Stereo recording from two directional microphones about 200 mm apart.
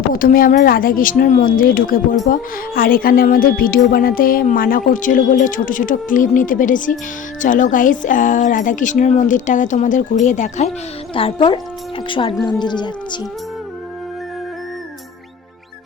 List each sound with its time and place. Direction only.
0.1 s a woman's voice: 45° left (ahead or behind)
11.1 s speech: 25° left (ahead or behind)